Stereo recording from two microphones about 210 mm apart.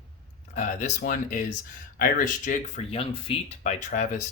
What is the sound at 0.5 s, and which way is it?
Speech, 35° left (ahead or behind).